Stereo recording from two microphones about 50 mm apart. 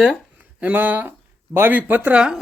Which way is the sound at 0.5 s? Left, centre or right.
Right.